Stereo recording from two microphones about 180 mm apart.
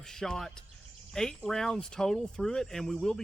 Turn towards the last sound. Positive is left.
turn(degrees=0)  # may be behind; listen again after turning